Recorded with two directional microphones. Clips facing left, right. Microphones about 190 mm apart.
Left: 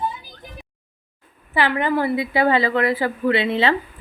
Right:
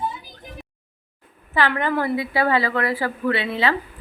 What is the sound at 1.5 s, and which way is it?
A woman's voice, 15° left (ahead or behind).